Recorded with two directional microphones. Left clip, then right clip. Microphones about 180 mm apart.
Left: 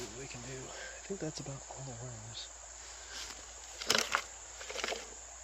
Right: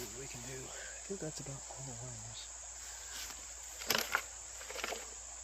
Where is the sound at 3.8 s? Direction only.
20° left (ahead or behind).